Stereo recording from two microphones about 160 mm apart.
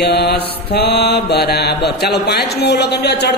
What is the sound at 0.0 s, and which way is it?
A man's voice, 85° left.